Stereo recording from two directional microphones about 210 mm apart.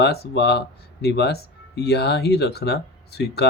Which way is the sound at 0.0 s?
50° left (ahead or behind).